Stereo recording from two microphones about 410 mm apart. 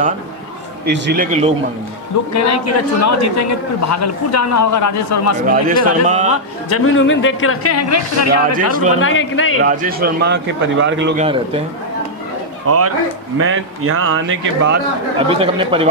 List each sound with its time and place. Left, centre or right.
0.8 s a man's voice: right
2.3 s a man's voice: left
5.5 s a man's voice: centre
6.7 s a man's voice: left
8.5 s a man's voice: centre
9.0 s a man's voice: left
9.6 s a man's voice: centre
12.6 s a man's voice: right
15.2 s speech: centre